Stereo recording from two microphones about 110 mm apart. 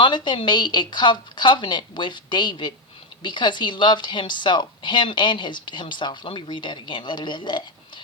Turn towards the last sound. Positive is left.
turn(degrees=45)  # may be behind; listen again after turning